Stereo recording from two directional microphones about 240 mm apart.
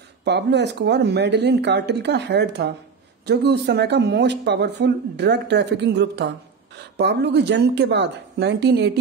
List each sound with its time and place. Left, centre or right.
0.2 s speech: right